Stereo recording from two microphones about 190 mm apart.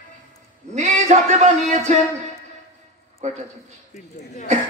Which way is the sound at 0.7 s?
40° right (ahead or behind).